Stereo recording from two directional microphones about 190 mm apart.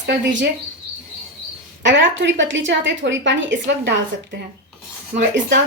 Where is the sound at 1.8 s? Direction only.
70° right (ahead or behind).